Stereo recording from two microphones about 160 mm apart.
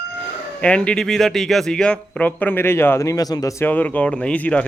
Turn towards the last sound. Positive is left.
turn(degrees=10)  # may be behind; listen again after turning